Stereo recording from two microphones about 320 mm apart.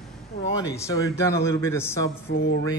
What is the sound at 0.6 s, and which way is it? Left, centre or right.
Speech, centre.